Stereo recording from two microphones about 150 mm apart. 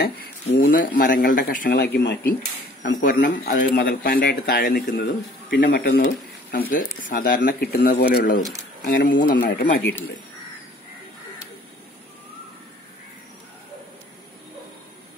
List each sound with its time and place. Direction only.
0.6 s speech: 70° left (ahead or behind); by 2.0 s 90° left
2.8 s speech: 70° left (ahead or behind)
5.6 s speech: 90° left
6.5 s speech: 75° left (ahead or behind); by 8.4 s 90° left
8.4 s speech: 25° right (ahead or behind)
8.8 s speech: 70° left (ahead or behind)